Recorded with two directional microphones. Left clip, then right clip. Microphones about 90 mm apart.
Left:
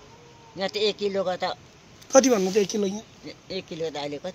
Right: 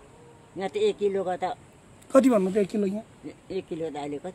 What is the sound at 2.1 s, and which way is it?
Speech, 30° right (ahead or behind).